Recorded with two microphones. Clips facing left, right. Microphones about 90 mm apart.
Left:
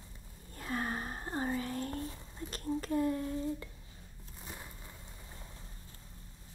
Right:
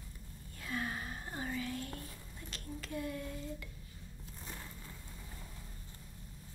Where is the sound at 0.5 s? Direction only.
40° left (ahead or behind).